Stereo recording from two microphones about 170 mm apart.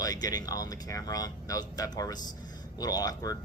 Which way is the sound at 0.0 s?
20° left (ahead or behind).